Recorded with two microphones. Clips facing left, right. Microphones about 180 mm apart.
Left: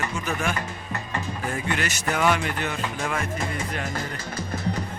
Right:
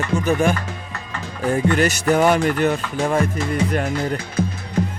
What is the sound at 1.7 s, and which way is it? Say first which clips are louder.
Music: right 10 dB; 40° right (ahead or behind).